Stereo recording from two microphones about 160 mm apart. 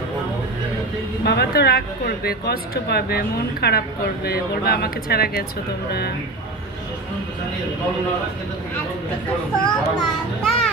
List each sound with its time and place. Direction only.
1.2 s a woman's voice: 90° left; by 5.4 s 75° left (ahead or behind)
9.6 s a child's voice: 5° left (ahead or behind)